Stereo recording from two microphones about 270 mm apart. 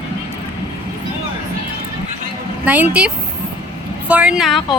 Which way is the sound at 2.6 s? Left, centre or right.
Centre.